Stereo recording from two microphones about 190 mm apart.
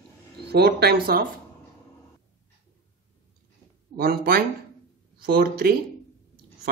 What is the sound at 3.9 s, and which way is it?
Speech, 55° right (ahead or behind).